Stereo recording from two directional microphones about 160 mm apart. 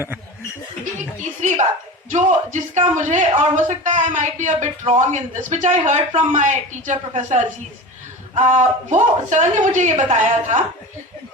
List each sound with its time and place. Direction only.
1.2 s speech: 50° right (ahead or behind)